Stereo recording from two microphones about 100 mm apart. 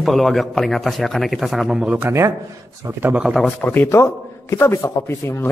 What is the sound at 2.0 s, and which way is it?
Speech, 25° right (ahead or behind).